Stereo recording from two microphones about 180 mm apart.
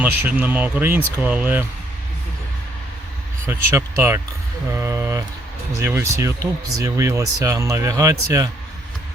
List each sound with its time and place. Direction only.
0.0 s speech: 10° right (ahead or behind)
3.4 s speech: 10° right (ahead or behind)